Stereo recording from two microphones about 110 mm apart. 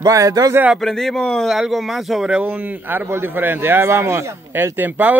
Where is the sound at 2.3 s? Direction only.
15° right (ahead or behind).